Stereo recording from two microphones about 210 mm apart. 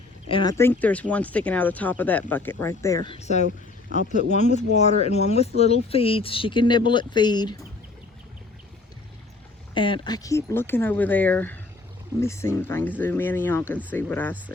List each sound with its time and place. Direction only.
0.3 s speech: 25° left (ahead or behind)
0.5 s speech: 10° left (ahead or behind)
9.7 s speech: 25° left (ahead or behind)